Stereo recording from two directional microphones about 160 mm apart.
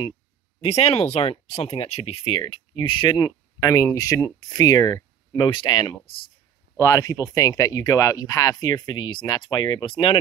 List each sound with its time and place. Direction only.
0.6 s speech: 40° left (ahead or behind)